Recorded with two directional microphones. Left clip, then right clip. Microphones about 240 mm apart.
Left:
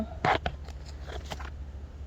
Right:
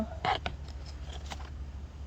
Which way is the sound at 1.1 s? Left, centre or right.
Left.